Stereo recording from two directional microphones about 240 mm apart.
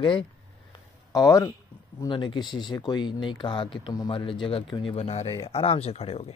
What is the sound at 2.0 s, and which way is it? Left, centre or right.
Speech, centre.